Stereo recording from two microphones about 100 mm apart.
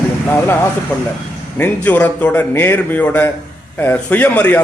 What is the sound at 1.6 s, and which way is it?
A man's voice, 15° left (ahead or behind).